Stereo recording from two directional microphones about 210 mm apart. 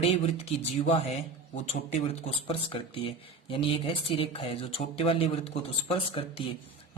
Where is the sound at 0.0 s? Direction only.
30° left (ahead or behind).